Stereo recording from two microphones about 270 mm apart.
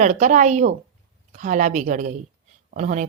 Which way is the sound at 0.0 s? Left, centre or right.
Right.